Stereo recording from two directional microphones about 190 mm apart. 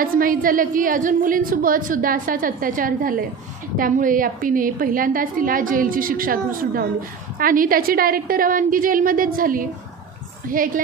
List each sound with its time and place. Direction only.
0.0 s a woman's voice: 45° right (ahead or behind)